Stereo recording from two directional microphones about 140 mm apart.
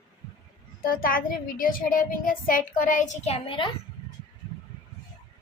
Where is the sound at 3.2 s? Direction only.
45° left (ahead or behind).